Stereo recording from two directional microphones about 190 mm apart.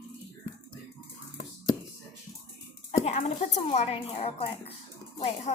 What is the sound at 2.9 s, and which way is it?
A woman's voice, 40° left (ahead or behind).